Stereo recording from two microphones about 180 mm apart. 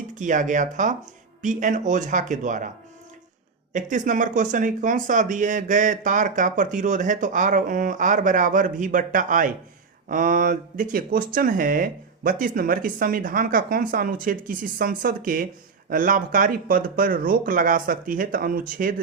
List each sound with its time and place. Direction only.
0.2 s speech: 45° right (ahead or behind)
3.7 s speech: 45° right (ahead or behind)